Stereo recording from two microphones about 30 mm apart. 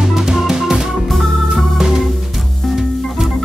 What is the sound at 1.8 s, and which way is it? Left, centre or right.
Music, centre.